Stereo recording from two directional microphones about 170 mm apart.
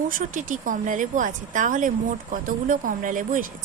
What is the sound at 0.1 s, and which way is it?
Speech, 50° right (ahead or behind).